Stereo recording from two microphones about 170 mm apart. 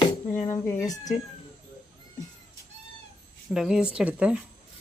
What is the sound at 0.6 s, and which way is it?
Speech, 15° left (ahead or behind).